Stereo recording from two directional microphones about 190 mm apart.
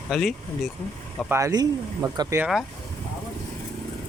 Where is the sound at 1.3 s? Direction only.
20° right (ahead or behind).